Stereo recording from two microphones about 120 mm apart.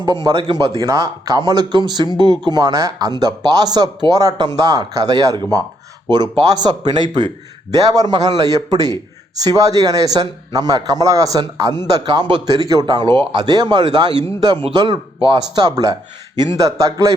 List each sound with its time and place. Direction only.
0.3 s a man's voice: 45° right (ahead or behind)
0.8 s a man's voice: 30° right (ahead or behind)